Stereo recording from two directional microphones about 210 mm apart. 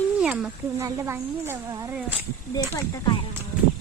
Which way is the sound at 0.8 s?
15° right (ahead or behind).